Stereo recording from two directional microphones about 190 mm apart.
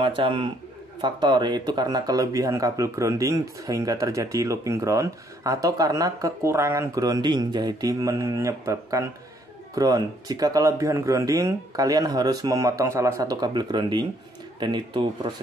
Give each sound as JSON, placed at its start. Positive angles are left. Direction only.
{"t": 0.0, "sound": "speech", "side_deg": -25}